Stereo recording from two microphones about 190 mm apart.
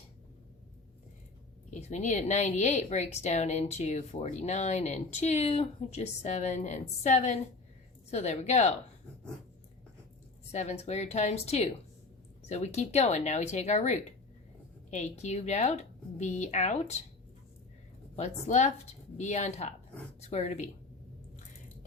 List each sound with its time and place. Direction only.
1.7 s a woman's voice: 35° left (ahead or behind)
10.5 s a woman's voice: 35° left (ahead or behind)
18.2 s a woman's voice: 35° left (ahead or behind)